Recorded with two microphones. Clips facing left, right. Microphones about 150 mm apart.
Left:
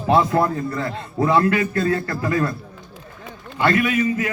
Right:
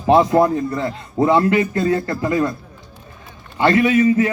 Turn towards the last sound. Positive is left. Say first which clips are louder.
# right 6 dB
turn(degrees=-30)  # may be behind; listen again after turning